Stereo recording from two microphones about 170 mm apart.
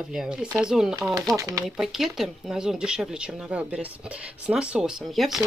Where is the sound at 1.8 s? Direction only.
Centre (ahead or behind).